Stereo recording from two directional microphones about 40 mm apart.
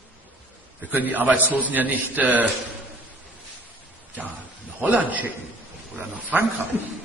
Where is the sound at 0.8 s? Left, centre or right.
Right.